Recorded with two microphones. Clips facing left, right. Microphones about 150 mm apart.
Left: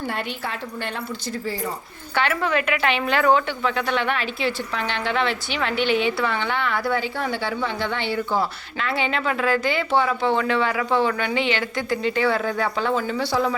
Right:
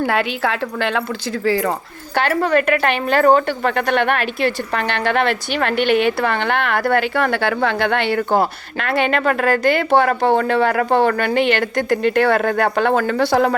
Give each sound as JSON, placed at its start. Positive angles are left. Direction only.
{"t": 0.0, "sound": "a woman's voice", "side_deg": -90}
{"t": 2.1, "sound": "a woman's voice", "side_deg": -40}